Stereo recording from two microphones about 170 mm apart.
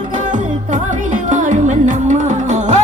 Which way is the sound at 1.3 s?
50° right (ahead or behind).